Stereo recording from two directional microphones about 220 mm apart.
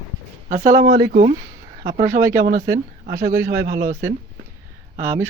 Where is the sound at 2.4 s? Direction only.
45° right (ahead or behind).